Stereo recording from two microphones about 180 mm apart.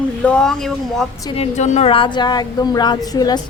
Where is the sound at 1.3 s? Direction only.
35° left (ahead or behind).